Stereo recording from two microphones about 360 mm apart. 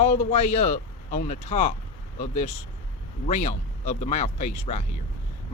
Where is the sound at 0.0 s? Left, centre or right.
Centre.